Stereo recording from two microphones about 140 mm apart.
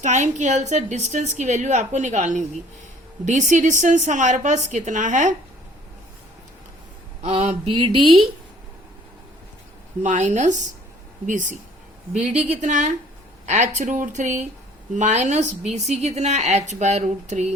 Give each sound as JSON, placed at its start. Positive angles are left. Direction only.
{"t": 0.0, "sound": "a woman's voice", "side_deg": -60}
{"t": 3.5, "sound": "a woman's voice", "side_deg": -65}
{"t": 7.2, "sound": "speech", "side_deg": -50}
{"t": 10.0, "sound": "a woman's voice", "side_deg": -55}
{"t": 12.3, "sound": "speech", "side_deg": -10}
{"t": 12.5, "sound": "a woman's voice", "side_deg": -60}